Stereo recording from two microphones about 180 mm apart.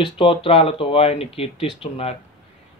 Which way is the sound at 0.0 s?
30° left (ahead or behind).